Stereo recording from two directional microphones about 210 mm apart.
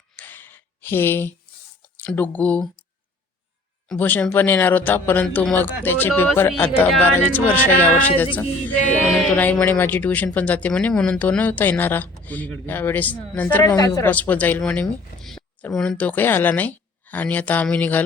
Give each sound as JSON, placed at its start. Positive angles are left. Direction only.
{"t": 0.2, "sound": "a sound", "side_deg": 10}
{"t": 2.0, "sound": "speech", "side_deg": 10}
{"t": 3.8, "sound": "speech", "side_deg": 10}
{"t": 9.3, "sound": "speech", "side_deg": 10}